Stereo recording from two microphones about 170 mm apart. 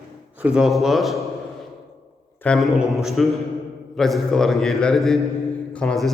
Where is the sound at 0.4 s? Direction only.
5° right (ahead or behind).